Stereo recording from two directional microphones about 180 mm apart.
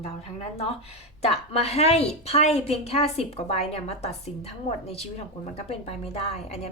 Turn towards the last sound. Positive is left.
turn(degrees=35)  # may be behind; listen again after turning